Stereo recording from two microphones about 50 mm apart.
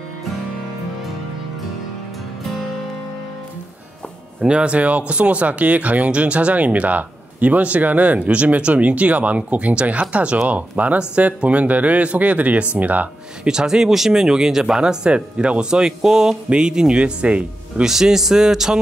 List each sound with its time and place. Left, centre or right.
4.4 s speech: centre
13.4 s speech: centre
17.8 s speech: centre